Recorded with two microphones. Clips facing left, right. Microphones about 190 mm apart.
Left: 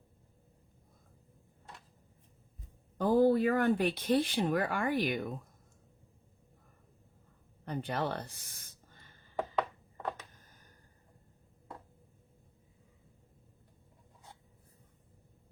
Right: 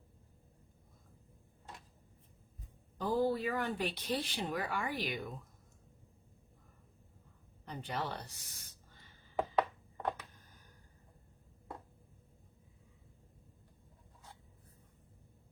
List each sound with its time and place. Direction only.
3.0 s speech: 55° left (ahead or behind)
7.6 s speech: 55° left (ahead or behind)